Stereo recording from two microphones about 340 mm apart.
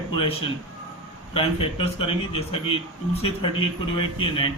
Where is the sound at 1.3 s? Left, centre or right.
Centre.